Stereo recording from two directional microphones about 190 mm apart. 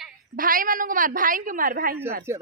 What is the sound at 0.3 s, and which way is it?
A woman's voice, 45° right (ahead or behind).